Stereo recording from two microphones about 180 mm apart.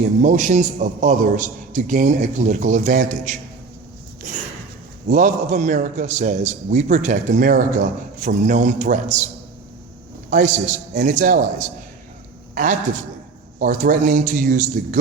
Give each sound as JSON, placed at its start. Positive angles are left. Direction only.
{"t": 0.2, "sound": "a man's voice", "side_deg": -45}
{"t": 10.2, "sound": "a man's voice", "side_deg": -45}